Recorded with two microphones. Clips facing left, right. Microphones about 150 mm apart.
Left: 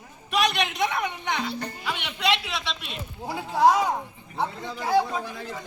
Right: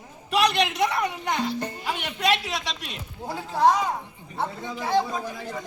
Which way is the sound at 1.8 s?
40° right (ahead or behind).